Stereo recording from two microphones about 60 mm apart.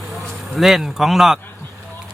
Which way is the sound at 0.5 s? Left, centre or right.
Centre.